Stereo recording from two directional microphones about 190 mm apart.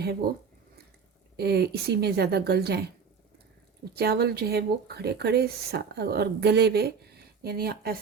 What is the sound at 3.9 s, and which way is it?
Speech, 55° right (ahead or behind).